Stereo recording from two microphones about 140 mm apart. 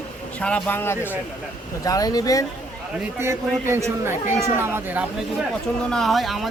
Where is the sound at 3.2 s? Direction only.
20° right (ahead or behind).